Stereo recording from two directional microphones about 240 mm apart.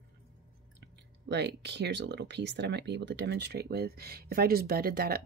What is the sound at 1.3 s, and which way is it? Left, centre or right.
Speech, right.